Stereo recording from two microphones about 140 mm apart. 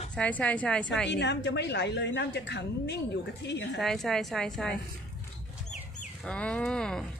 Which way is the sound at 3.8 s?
Centre (ahead or behind).